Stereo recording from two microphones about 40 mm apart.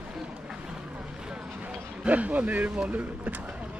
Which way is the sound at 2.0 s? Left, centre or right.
Right.